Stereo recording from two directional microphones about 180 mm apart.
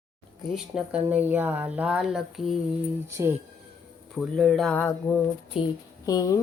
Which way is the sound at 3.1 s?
15° right (ahead or behind).